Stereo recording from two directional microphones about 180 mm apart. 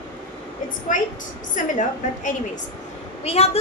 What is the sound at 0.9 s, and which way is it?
A woman's voice, 45° left (ahead or behind).